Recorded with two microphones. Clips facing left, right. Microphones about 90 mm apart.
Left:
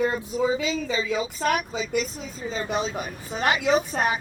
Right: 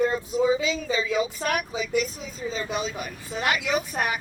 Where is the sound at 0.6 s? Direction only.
35° left (ahead or behind).